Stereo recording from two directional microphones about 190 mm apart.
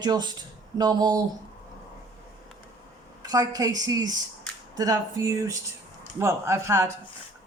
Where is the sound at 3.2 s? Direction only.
20° right (ahead or behind).